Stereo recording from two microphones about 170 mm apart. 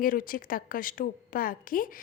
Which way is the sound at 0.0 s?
55° left (ahead or behind).